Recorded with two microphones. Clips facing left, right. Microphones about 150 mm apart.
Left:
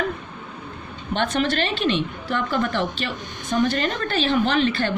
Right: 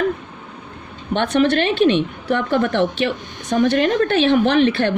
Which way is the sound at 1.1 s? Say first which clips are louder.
Right 6 dB; 55° right (ahead or behind).